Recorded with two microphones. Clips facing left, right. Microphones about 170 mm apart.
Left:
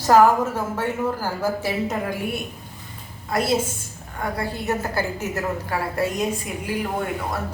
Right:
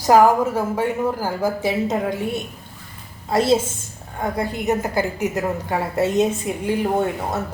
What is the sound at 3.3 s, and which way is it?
A woman's voice, 25° right (ahead or behind).